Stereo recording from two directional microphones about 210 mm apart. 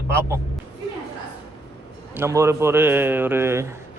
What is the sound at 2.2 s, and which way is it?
Speech, 15° right (ahead or behind).